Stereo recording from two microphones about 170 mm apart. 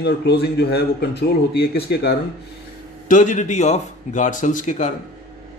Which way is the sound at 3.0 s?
50° left (ahead or behind).